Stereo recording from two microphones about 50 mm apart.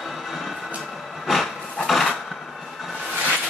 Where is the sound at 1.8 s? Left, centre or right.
Centre.